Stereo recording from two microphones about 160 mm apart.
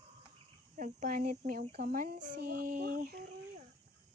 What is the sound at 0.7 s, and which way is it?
Speech, 55° right (ahead or behind).